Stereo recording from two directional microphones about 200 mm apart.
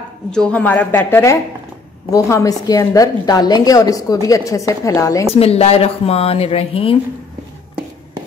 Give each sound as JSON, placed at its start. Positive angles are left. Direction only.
{"t": 0.3, "sound": "a woman's voice", "side_deg": 5}
{"t": 5.3, "sound": "speech", "side_deg": 30}